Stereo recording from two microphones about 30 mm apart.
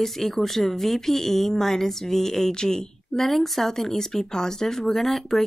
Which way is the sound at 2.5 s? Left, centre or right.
Left.